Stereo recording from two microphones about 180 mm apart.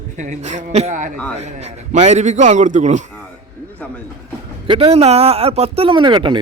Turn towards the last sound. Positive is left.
turn(degrees=-25)  # may be behind; listen again after turning